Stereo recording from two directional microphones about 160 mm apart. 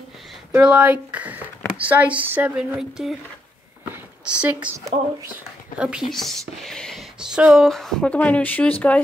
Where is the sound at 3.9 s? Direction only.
5° right (ahead or behind).